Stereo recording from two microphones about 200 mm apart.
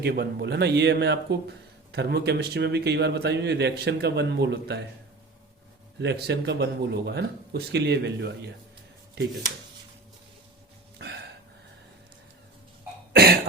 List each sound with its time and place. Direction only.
0.0 s speech: 55° right (ahead or behind)
6.0 s speech: 55° right (ahead or behind)
10.9 s a sound: 55° right (ahead or behind)